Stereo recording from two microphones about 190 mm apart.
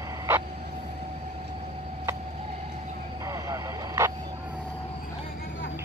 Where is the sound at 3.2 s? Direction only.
15° right (ahead or behind).